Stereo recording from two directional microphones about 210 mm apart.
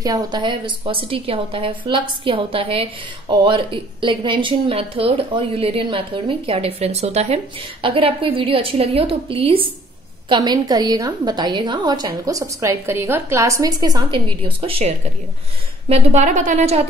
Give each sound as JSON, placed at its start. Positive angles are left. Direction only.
{"t": 0.0, "sound": "a woman's voice", "side_deg": -20}
{"t": 14.7, "sound": "a woman's voice", "side_deg": -30}